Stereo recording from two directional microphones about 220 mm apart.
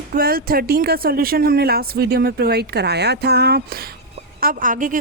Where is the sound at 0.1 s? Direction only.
40° right (ahead or behind).